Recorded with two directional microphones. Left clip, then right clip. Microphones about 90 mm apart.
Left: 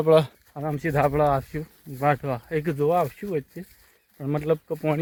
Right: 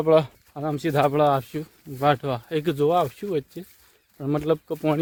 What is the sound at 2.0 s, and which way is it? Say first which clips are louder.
Speech: right 2 dB; 35° right (ahead or behind).